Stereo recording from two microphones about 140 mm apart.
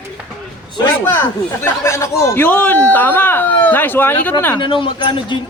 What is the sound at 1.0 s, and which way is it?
Speech, 15° left (ahead or behind).